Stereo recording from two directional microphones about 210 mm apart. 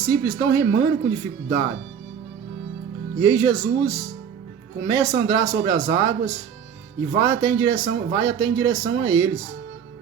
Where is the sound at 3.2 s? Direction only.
15° right (ahead or behind).